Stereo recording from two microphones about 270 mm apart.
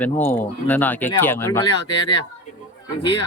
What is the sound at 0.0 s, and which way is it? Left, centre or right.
Speech, centre.